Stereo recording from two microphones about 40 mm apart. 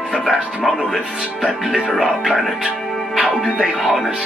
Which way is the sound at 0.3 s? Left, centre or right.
Centre.